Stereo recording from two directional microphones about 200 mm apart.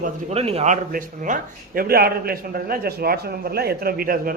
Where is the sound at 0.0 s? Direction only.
30° right (ahead or behind).